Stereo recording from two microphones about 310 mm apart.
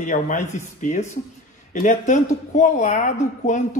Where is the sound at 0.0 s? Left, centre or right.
Left.